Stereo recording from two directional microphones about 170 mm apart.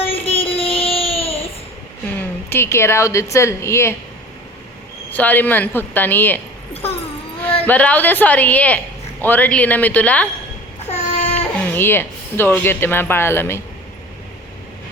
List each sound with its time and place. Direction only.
0.0 s child singing: 35° left (ahead or behind)
2.5 s speech: 15° left (ahead or behind)
5.1 s speech: 10° left (ahead or behind)
7.7 s speech: 10° left (ahead or behind)
10.8 s a sound: 40° left (ahead or behind)
11.3 s speech: 10° left (ahead or behind)